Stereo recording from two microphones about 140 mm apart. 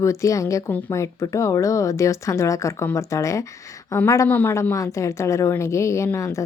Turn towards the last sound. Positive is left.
turn(degrees=20)  # may be behind; listen again after turning